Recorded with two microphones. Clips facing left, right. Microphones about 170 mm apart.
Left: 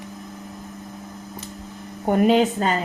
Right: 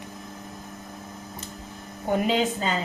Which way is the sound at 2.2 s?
55° left (ahead or behind).